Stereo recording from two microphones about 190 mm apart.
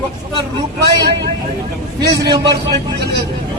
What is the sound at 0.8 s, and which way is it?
A man's voice, 60° right (ahead or behind).